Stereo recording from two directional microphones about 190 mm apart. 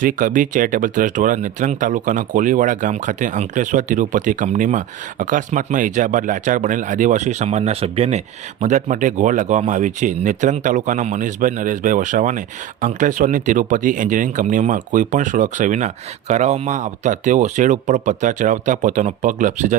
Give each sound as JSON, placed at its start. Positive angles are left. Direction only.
{"t": 0.0, "sound": "speech", "side_deg": -45}